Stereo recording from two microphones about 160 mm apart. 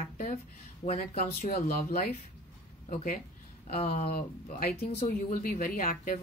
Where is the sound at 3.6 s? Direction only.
45° left (ahead or behind).